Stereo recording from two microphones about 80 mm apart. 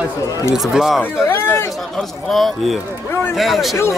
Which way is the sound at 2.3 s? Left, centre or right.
Centre.